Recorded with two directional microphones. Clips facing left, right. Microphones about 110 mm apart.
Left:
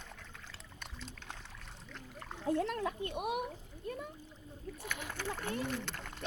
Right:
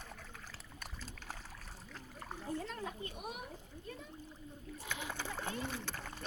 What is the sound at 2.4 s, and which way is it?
Speech, 75° left (ahead or behind).